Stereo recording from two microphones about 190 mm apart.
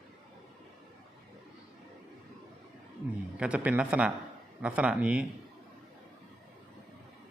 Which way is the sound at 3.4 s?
5° right (ahead or behind).